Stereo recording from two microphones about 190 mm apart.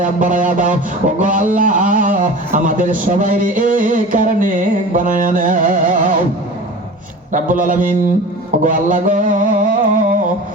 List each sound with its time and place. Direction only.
0.0 s a man's voice: 40° right (ahead or behind)
7.3 s a man's voice: 45° right (ahead or behind)
8.6 s a sound: 45° right (ahead or behind)